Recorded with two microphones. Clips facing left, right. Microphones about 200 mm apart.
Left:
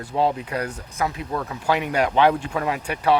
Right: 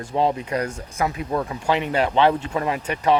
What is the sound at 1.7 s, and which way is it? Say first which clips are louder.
Speech: even; 10° left (ahead or behind).